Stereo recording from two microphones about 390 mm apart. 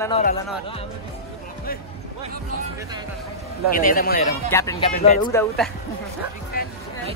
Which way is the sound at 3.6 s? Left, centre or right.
Left.